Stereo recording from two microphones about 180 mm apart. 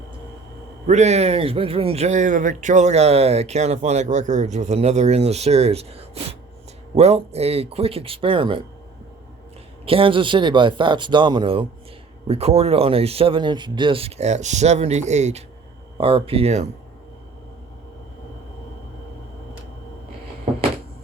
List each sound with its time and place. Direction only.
0.9 s speech: 40° right (ahead or behind)
9.8 s speech: 30° right (ahead or behind)